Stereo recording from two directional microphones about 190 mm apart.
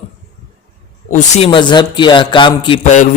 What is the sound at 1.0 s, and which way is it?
Speech, 45° left (ahead or behind).